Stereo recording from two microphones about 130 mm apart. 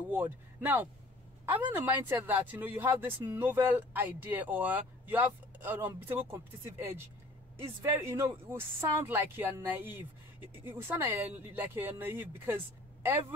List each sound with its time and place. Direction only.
0.1 s speech: 15° right (ahead or behind)